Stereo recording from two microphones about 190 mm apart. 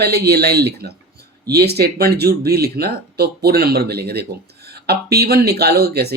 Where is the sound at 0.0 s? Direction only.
60° right (ahead or behind).